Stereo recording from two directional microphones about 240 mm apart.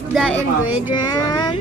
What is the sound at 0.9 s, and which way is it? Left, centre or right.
Speech, centre.